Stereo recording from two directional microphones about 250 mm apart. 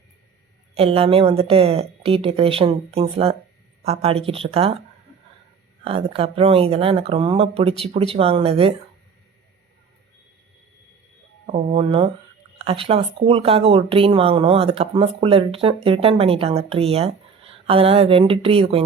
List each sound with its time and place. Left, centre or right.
0.7 s speech: right
5.8 s speech: right
11.4 s speech: right